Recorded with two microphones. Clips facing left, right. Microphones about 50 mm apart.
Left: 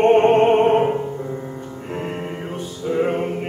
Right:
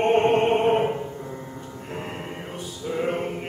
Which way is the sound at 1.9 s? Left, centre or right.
Centre.